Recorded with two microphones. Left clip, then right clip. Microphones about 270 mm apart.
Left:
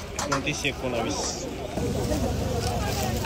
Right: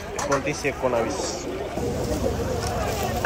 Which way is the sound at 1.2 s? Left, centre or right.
Centre.